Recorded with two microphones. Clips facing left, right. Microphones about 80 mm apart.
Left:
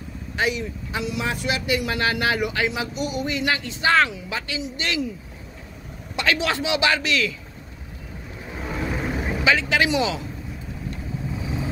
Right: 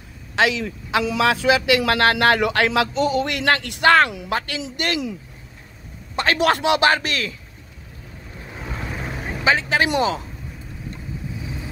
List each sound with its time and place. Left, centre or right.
0.4 s speech: right
4.6 s a man's voice: right
6.1 s a man's voice: right
8.5 s vehicle: centre
9.4 s a man's voice: right